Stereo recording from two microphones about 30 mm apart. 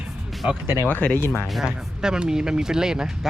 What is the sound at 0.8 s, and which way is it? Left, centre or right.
Speech, left.